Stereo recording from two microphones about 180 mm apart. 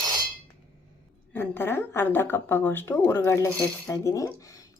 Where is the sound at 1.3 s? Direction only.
10° left (ahead or behind).